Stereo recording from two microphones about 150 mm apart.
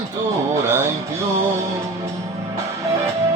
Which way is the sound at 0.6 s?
20° right (ahead or behind).